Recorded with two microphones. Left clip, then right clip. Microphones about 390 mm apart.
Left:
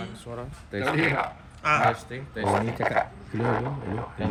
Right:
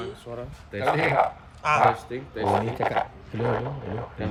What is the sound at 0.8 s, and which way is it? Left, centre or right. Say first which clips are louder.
Speech: right 2 dB; right.